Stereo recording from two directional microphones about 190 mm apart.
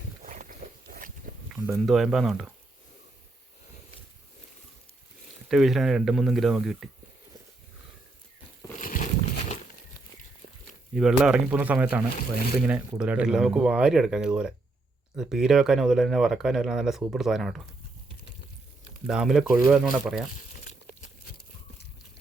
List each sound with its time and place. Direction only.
0.2 s a sound: 45° right (ahead or behind)
1.5 s speech: 5° right (ahead or behind)
5.5 s speech: centre (ahead or behind)
8.8 s a sound: 45° left (ahead or behind)
10.9 s speech: 5° right (ahead or behind)
19.0 s speech: centre (ahead or behind)